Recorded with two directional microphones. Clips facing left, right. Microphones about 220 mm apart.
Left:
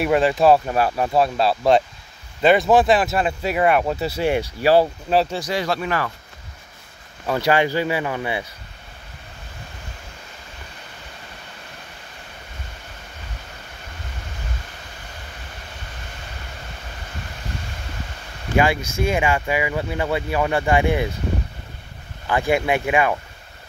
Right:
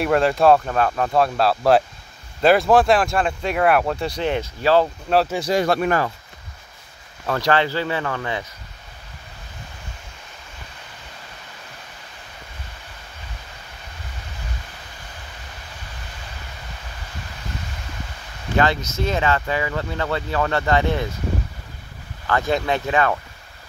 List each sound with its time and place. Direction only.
0.0 s speech: centre (ahead or behind)
5.5 s speech: 50° right (ahead or behind)
7.2 s speech: 5° left (ahead or behind)
18.9 s speech: 10° left (ahead or behind)
22.2 s speech: 15° left (ahead or behind)